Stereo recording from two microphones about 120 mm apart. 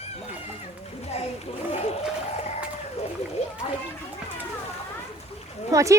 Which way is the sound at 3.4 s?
60° left (ahead or behind).